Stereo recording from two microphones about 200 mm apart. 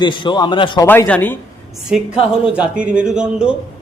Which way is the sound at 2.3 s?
5° right (ahead or behind).